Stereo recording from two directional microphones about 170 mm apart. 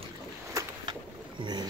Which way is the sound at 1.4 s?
25° right (ahead or behind).